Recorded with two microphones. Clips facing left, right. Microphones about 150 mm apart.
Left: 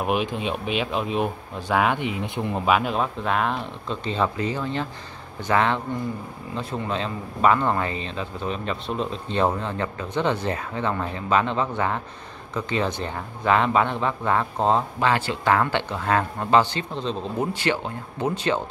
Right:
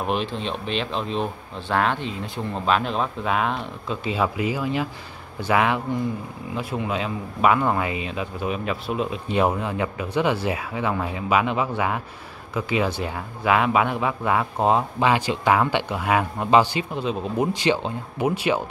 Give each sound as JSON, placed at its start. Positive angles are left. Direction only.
{"t": 0.0, "sound": "speech", "side_deg": 10}